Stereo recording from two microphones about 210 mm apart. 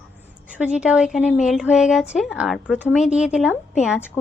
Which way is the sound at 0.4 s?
5° right (ahead or behind).